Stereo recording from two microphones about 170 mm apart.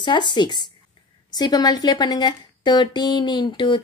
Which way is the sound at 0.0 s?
25° left (ahead or behind).